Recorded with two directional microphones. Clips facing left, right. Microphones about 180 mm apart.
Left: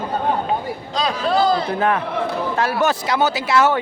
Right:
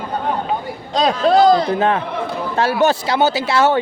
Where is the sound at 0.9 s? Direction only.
35° right (ahead or behind).